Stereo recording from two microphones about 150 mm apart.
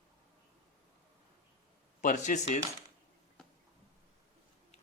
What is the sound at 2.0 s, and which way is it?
Speech, 60° left (ahead or behind).